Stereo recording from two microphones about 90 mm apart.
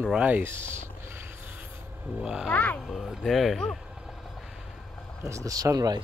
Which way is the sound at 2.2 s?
10° right (ahead or behind).